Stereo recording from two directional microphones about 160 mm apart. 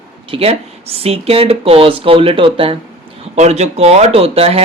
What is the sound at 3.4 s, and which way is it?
Speech, 45° right (ahead or behind).